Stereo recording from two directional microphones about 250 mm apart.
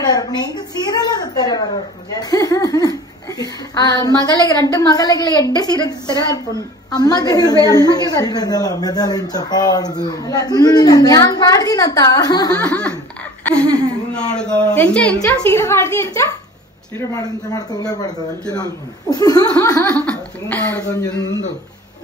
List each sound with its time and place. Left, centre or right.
0.0 s a woman's voice: centre
12.5 s a woman's voice: centre